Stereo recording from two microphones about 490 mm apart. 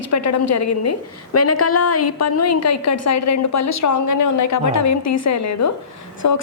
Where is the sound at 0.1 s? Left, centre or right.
Left.